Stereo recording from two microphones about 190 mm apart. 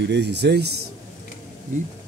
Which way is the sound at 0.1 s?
65° right (ahead or behind).